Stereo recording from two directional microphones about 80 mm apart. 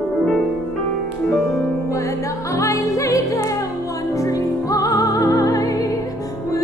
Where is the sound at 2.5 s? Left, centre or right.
Left.